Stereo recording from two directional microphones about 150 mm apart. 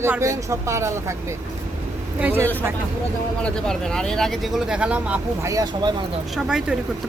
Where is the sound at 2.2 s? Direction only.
15° right (ahead or behind).